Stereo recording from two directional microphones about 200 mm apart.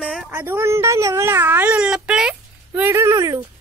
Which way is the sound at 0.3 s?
10° right (ahead or behind).